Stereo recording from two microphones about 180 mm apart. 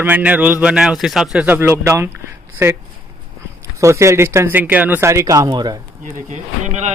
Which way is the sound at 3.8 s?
15° right (ahead or behind).